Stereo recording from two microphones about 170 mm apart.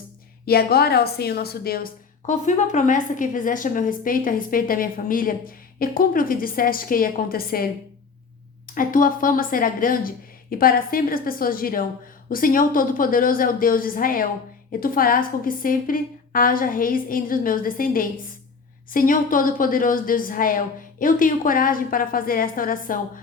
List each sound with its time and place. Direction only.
0.4 s a woman's voice: 65° left (ahead or behind)
8.6 s a woman's voice: 55° left (ahead or behind)